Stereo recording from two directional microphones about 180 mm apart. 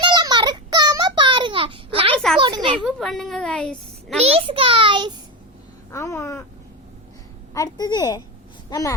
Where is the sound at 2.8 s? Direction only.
Centre (ahead or behind).